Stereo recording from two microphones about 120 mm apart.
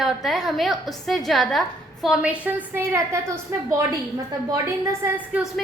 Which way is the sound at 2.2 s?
10° right (ahead or behind).